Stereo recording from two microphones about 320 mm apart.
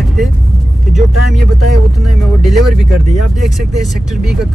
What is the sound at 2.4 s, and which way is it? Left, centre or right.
Speech, centre.